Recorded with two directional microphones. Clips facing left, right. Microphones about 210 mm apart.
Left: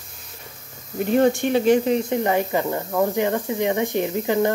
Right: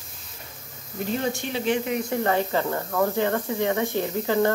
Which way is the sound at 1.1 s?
55° left (ahead or behind).